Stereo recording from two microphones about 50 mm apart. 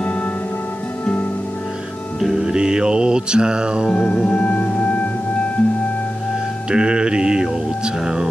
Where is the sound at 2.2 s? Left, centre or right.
Centre.